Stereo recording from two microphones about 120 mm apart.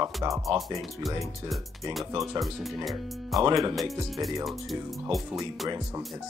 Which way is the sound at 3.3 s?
30° right (ahead or behind).